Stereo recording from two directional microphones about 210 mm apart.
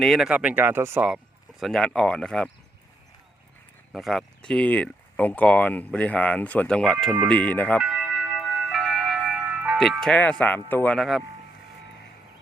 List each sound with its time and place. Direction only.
0.0 s speech: centre (ahead or behind)
3.9 s speech: centre (ahead or behind)